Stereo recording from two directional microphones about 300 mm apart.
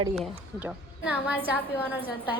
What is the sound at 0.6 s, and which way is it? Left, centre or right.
Speech, centre.